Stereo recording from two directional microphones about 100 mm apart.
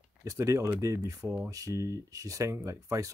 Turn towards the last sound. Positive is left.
turn(degrees=-30)  # may be behind; listen again after turning